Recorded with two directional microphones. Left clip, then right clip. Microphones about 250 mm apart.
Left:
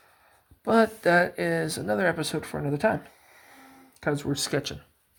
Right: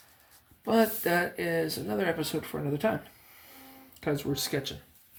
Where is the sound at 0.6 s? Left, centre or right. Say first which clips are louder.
Left 4 dB; left.